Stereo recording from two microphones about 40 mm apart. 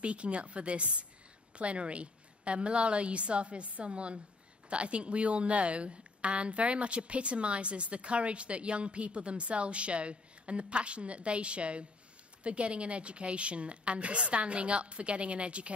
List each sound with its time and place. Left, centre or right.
0.0 s a woman's voice: right